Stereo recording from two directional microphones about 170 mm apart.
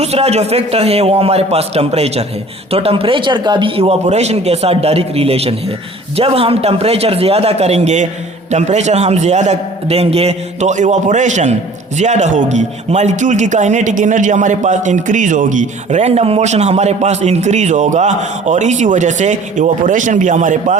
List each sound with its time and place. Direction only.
0.0 s a man's voice: 40° right (ahead or behind)